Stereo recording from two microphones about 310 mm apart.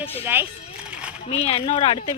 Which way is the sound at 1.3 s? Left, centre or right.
Centre.